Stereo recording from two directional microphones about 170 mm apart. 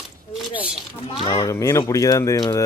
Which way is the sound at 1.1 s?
25° left (ahead or behind).